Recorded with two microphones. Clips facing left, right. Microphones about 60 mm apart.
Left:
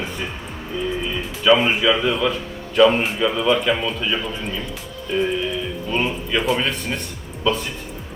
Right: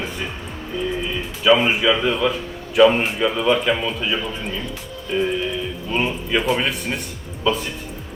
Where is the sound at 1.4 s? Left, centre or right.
Centre.